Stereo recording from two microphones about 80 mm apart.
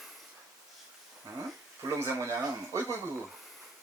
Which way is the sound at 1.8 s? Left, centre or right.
Right.